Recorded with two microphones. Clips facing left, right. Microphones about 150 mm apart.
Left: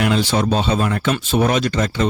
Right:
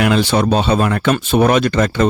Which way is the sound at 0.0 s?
65° right (ahead or behind).